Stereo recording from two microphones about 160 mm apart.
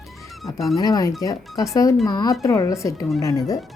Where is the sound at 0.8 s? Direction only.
25° left (ahead or behind).